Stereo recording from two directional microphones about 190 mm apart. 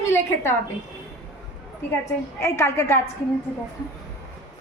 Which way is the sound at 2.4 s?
15° left (ahead or behind).